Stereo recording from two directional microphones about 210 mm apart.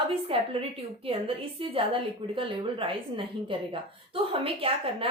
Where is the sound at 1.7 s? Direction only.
25° right (ahead or behind).